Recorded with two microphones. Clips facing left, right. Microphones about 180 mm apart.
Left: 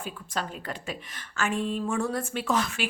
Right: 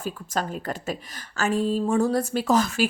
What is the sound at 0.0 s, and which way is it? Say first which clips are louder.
A woman's voice: right 5 dB; 45° right (ahead or behind).